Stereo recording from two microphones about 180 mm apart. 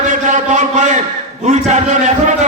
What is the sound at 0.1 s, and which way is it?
Chant, 45° right (ahead or behind).